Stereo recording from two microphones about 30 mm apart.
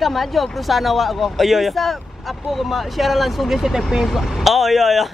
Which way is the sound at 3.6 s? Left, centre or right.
Centre.